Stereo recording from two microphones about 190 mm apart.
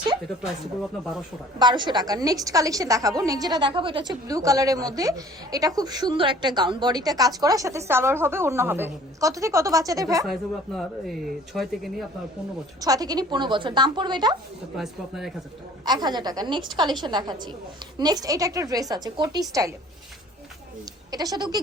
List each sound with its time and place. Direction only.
1.5 s a woman's voice: 25° right (ahead or behind)
10.8 s speech: centre (ahead or behind)
12.8 s a woman's voice: 20° right (ahead or behind)
14.8 s speech: centre (ahead or behind)
15.8 s a woman's voice: 20° right (ahead or behind)
21.1 s a woman's voice: 20° right (ahead or behind)